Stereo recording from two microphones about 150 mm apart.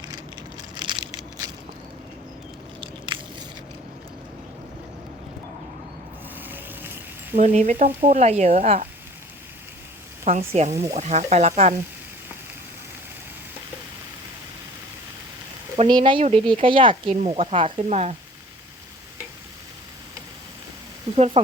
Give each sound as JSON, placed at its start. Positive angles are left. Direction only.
{"t": 0.8, "sound": "crushing", "side_deg": -30}
{"t": 6.4, "sound": "a sound", "side_deg": -15}
{"t": 7.3, "sound": "speech", "side_deg": -45}
{"t": 10.3, "sound": "speech", "side_deg": -40}
{"t": 10.7, "sound": "speech", "side_deg": -20}
{"t": 10.9, "sound": "speech", "side_deg": -50}
{"t": 15.8, "sound": "speech", "side_deg": -30}
{"t": 21.2, "sound": "speech", "side_deg": -40}